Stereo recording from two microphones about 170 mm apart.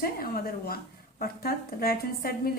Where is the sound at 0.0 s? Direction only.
60° left (ahead or behind).